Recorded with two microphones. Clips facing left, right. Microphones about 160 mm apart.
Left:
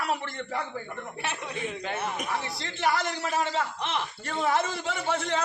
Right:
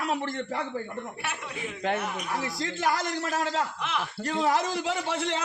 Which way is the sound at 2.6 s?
40° right (ahead or behind).